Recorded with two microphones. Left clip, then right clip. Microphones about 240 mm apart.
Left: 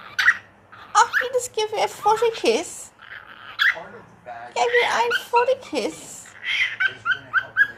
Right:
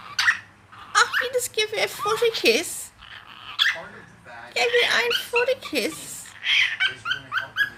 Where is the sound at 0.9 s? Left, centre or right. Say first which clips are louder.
Left 2 dB; centre.